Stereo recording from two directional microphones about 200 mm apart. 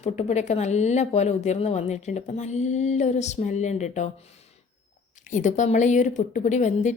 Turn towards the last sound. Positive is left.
turn(degrees=35)  # may be behind; listen again after turning